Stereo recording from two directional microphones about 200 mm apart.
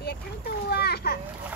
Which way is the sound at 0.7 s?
50° left (ahead or behind).